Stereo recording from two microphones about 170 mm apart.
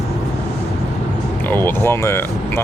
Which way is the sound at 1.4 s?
10° left (ahead or behind).